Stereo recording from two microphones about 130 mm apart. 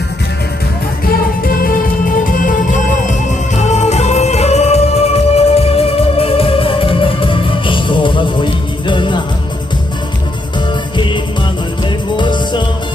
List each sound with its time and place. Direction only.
1.4 s music: 90° left; by 9.1 s 35° left (ahead or behind)
10.9 s music: 40° left (ahead or behind)